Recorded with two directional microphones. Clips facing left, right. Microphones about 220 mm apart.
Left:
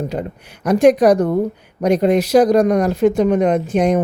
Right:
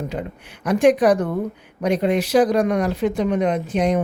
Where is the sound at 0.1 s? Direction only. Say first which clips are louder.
Left 4 dB; 40° left (ahead or behind).